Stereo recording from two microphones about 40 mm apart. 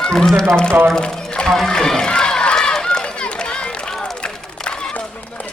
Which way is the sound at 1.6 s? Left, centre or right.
Centre.